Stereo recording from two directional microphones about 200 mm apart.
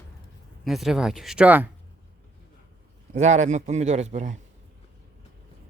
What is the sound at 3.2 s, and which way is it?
A man's voice, 35° right (ahead or behind).